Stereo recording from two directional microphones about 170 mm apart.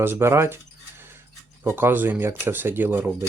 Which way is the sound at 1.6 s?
10° right (ahead or behind).